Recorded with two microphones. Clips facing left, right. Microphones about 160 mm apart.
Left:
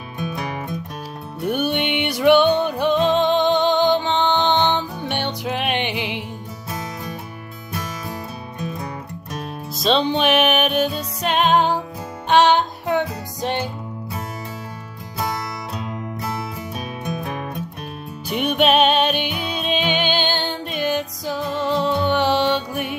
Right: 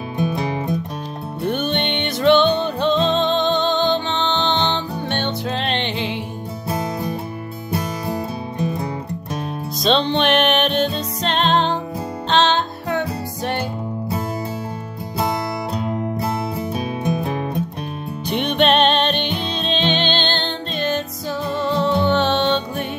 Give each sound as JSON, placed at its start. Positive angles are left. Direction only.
{"t": 0.2, "sound": "music", "side_deg": -30}
{"t": 1.5, "sound": "music", "side_deg": 10}
{"t": 6.7, "sound": "music", "side_deg": -30}
{"t": 9.8, "sound": "music", "side_deg": 5}
{"t": 15.7, "sound": "music", "side_deg": -30}
{"t": 18.3, "sound": "music", "side_deg": 5}